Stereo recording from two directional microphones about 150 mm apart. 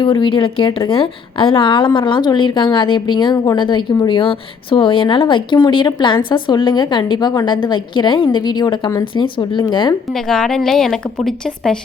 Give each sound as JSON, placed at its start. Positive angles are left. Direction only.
{"t": 0.0, "sound": "a woman's voice", "side_deg": 35}
{"t": 10.2, "sound": "a woman's voice", "side_deg": 5}